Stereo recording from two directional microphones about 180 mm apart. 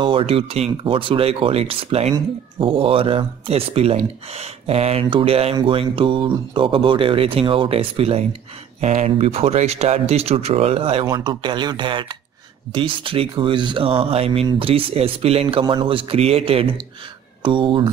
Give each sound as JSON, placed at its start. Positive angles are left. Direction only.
{"t": 0.0, "sound": "speech", "side_deg": -30}